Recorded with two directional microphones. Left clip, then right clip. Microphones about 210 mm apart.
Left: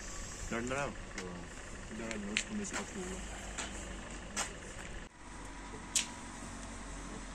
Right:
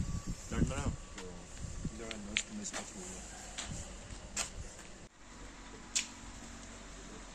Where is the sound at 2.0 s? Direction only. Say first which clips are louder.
Left 1 dB; 20° right (ahead or behind).